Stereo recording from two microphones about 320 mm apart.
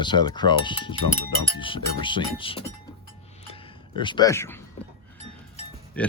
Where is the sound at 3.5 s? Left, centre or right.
Centre.